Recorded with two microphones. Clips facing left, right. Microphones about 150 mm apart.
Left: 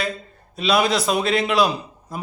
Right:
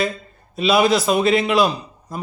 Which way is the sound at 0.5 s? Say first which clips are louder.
Right 3 dB; centre (ahead or behind).